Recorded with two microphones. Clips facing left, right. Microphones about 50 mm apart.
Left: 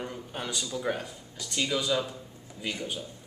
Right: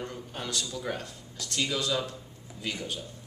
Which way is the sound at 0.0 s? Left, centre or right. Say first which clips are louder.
Left 1 dB; centre.